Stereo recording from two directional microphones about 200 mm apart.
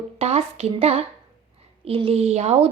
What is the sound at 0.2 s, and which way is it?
A woman's voice, 30° right (ahead or behind).